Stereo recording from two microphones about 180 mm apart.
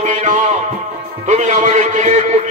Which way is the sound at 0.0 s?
45° right (ahead or behind).